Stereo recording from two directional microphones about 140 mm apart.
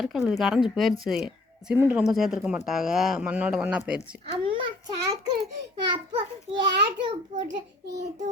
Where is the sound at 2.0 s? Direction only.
5° right (ahead or behind).